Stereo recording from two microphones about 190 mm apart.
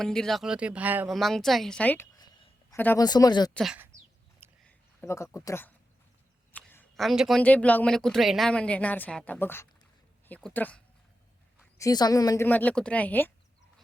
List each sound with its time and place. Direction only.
0.0 s speech: 5° left (ahead or behind)
2.1 s a sound: 20° left (ahead or behind)
2.7 s speech: 10° left (ahead or behind)
3.5 s speech: centre (ahead or behind)
4.6 s speech: 10° left (ahead or behind)
11.8 s speech: 20° left (ahead or behind)